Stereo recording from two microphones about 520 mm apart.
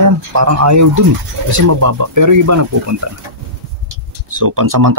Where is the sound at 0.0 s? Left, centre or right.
Right.